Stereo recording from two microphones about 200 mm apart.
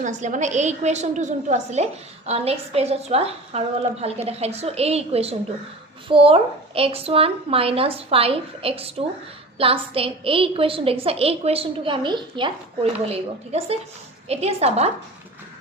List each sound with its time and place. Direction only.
0.0 s a woman's voice: 35° right (ahead or behind)